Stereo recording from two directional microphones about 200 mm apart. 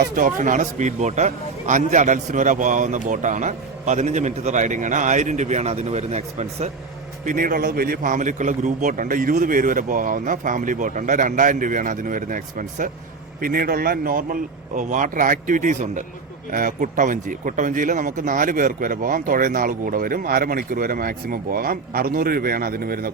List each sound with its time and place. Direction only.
0.2 s a man's voice: 40° right (ahead or behind)
7.3 s a man's voice: 45° right (ahead or behind)